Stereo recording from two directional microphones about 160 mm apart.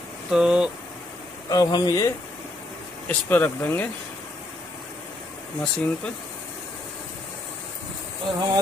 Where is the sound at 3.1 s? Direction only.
10° left (ahead or behind).